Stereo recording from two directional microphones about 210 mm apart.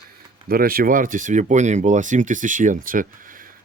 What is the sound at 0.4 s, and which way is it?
Speech, 45° right (ahead or behind).